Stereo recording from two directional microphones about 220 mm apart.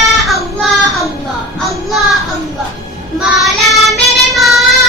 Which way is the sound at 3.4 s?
Centre (ahead or behind).